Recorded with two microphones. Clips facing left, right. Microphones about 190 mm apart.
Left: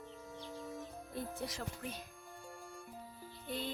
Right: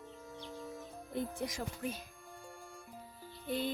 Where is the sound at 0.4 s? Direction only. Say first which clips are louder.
Even; centre (ahead or behind).